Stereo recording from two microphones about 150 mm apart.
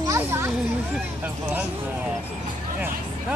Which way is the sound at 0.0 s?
20° right (ahead or behind).